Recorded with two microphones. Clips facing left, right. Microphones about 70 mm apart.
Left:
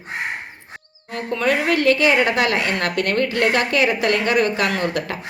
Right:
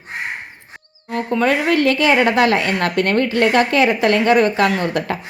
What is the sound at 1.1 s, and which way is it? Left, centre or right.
A woman's voice, right.